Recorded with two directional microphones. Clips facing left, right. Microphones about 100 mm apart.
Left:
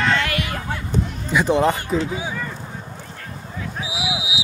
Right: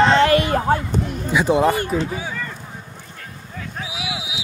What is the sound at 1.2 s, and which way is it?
Speech, 10° right (ahead or behind).